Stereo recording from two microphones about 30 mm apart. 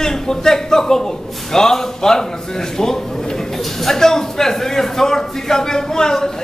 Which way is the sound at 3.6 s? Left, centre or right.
Centre.